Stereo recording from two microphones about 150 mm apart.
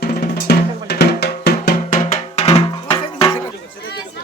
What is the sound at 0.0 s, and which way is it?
Drum, 80° left.